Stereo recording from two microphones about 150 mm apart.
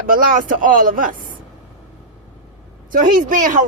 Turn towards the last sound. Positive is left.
turn(degrees=-60)  # may be behind; listen again after turning